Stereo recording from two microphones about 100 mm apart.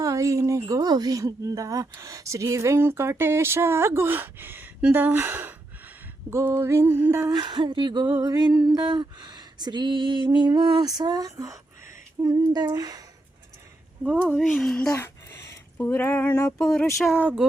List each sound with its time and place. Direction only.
0.0 s a woman's voice: 35° right (ahead or behind)
7.4 s a sound: 55° right (ahead or behind); by 11.6 s 35° right (ahead or behind)
12.2 s humming: 35° right (ahead or behind)
14.0 s speech: 15° right (ahead or behind)
14.4 s speech: centre (ahead or behind)
14.9 s speech: 30° left (ahead or behind)
16.6 s speech: centre (ahead or behind)